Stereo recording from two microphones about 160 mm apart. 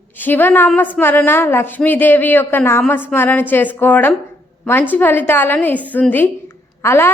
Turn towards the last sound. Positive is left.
turn(degrees=15)  # may be behind; listen again after turning